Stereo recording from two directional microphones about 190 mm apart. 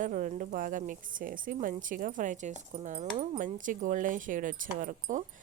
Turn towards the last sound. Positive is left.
turn(degrees=-40)  # may be behind; listen again after turning